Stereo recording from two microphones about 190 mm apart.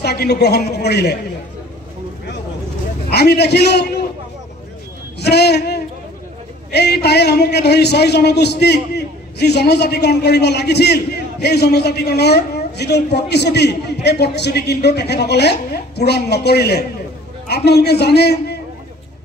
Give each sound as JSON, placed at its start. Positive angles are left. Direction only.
{"t": 0.0, "sound": "a man's voice", "side_deg": 55}
{"t": 3.1, "sound": "a man's voice", "side_deg": 60}
{"t": 5.2, "sound": "a sound", "side_deg": 60}
{"t": 6.7, "sound": "a man's voice", "side_deg": 60}